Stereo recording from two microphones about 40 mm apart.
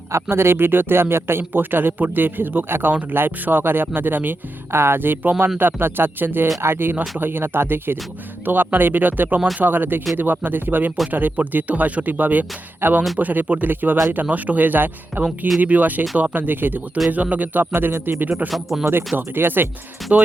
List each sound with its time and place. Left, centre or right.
0.3 s speech: right
4.7 s speech: right
6.6 s speech: right
8.4 s speech: right
17.1 s speech: right
17.7 s speech: right
18.4 s speech: centre
18.9 s speech: right
20.0 s speech: centre